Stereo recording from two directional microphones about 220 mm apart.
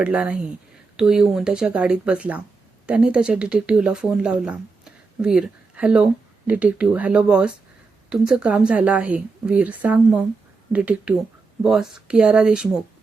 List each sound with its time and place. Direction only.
0.0 s a woman's voice: 5° right (ahead or behind)